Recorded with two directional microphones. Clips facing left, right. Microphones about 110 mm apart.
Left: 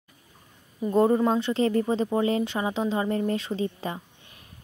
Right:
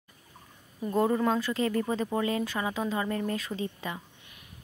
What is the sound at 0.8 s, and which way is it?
Speech, 25° left (ahead or behind).